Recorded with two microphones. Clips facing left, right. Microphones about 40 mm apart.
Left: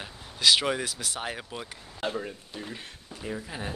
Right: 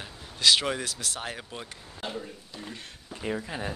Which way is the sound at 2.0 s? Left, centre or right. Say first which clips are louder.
Left 4 dB; left.